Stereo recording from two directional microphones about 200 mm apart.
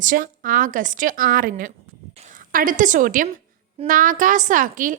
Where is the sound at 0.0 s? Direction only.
40° right (ahead or behind).